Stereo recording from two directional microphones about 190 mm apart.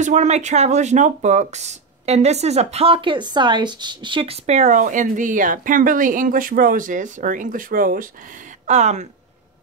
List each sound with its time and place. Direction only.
0.0 s speech: 40° right (ahead or behind)
8.6 s speech: 35° right (ahead or behind)